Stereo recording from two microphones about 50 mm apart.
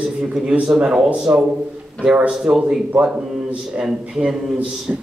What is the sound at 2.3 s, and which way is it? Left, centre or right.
A man's voice, centre.